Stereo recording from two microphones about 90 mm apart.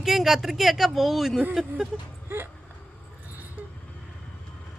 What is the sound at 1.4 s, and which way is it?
Speech, 15° right (ahead or behind).